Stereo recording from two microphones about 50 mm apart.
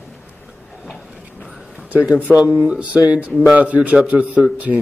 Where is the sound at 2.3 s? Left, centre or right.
Right.